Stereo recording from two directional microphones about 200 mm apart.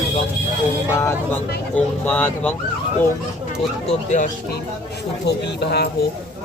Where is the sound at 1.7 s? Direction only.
5° left (ahead or behind).